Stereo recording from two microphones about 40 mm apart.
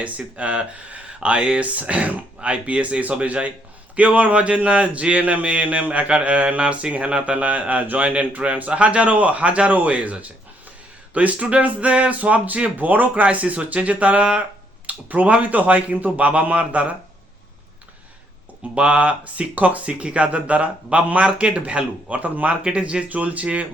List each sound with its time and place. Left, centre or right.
0.0 s speech: right
14.8 s speech: right
18.7 s speech: right